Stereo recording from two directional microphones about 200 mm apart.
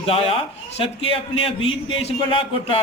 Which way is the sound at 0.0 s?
30° left (ahead or behind).